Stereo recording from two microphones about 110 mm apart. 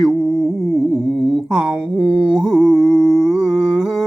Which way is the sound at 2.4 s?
5° right (ahead or behind).